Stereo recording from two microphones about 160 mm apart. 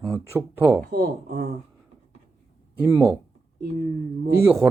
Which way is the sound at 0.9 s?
65° right (ahead or behind).